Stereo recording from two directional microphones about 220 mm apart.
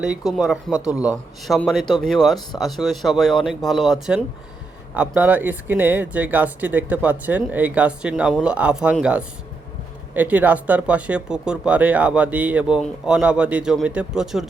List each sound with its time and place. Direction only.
0.0 s speech: 5° right (ahead or behind)